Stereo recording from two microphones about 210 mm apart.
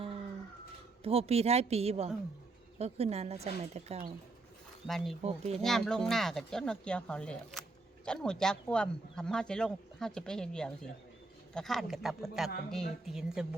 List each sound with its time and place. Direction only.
1.0 s a woman's voice: 30° right (ahead or behind)
4.9 s speech: centre (ahead or behind)
5.2 s a woman's voice: 30° right (ahead or behind)
5.6 s speech: centre (ahead or behind)